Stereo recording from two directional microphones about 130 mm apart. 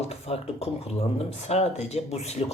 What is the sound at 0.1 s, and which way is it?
Speech, 50° left (ahead or behind).